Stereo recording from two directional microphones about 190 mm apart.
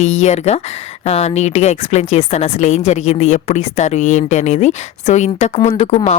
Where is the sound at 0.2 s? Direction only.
35° left (ahead or behind).